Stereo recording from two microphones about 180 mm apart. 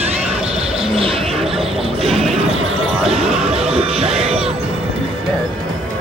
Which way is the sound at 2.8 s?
Centre (ahead or behind).